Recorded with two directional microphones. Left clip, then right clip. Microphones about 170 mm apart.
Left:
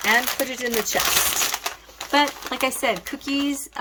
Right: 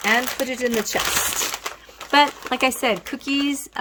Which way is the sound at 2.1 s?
50° right (ahead or behind).